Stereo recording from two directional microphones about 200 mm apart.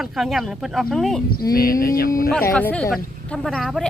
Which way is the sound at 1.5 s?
45° left (ahead or behind).